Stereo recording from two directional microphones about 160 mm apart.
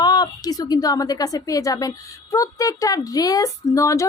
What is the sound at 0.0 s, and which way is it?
A woman's voice, 25° left (ahead or behind).